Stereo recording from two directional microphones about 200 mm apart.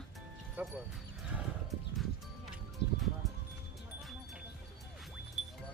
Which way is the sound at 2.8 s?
60° left (ahead or behind).